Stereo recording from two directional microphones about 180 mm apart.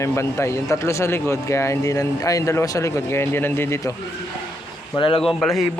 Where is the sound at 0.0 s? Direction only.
15° left (ahead or behind).